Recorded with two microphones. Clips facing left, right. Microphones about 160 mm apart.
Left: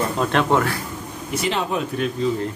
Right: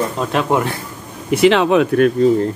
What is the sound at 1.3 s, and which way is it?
Speech, 80° right.